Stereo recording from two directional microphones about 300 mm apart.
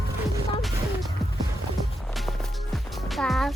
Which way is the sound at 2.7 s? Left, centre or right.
Centre.